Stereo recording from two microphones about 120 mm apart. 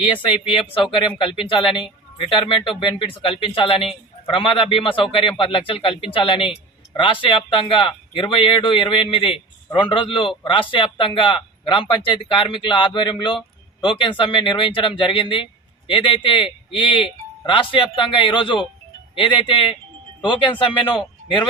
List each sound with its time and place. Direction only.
0.0 s speech: 45° left (ahead or behind)